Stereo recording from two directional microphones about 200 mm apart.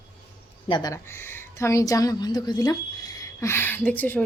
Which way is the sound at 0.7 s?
20° left (ahead or behind).